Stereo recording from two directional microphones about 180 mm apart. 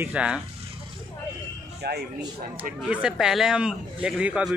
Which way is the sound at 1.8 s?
65° right (ahead or behind).